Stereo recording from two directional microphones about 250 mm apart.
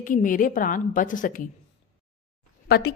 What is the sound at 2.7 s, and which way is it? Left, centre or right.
Speech, left.